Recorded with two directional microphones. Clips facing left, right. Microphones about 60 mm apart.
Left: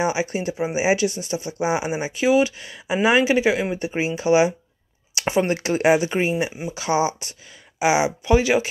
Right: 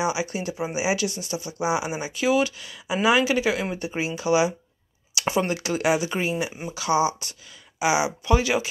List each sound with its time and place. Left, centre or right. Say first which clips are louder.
0.0 s speech: left 3 dB; left
5.1 s a sound: left 2 dB; left
5.5 s speech: left 5 dB; left